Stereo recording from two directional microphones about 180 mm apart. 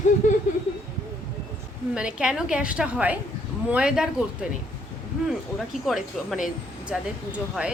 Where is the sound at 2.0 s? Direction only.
5° right (ahead or behind).